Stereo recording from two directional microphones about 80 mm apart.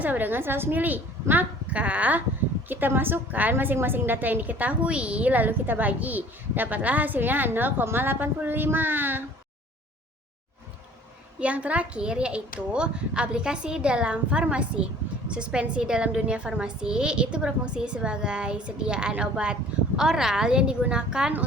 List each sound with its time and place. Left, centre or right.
0.0 s a woman's voice: right
11.3 s a child's voice: centre